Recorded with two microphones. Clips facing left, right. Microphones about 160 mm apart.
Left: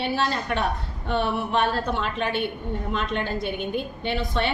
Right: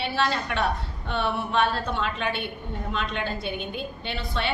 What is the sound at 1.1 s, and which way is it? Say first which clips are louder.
A woman's voice: left 3 dB; 45° left (ahead or behind).